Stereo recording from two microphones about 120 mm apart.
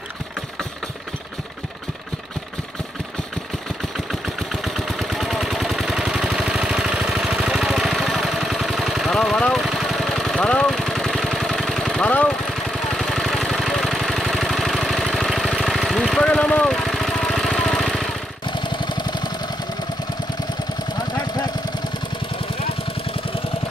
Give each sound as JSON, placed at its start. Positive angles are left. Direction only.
{"t": 4.1, "sound": "a sound", "side_deg": 0}
{"t": 12.4, "sound": "vehicle", "side_deg": 0}
{"t": 18.5, "sound": "jackhammer", "side_deg": 40}